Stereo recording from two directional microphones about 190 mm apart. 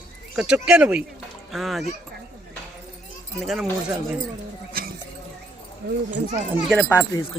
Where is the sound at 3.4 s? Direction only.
Centre (ahead or behind).